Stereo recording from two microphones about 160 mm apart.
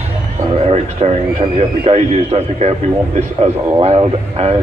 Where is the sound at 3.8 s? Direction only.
40° right (ahead or behind).